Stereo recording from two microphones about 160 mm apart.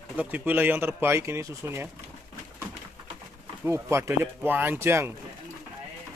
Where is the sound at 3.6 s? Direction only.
15° right (ahead or behind).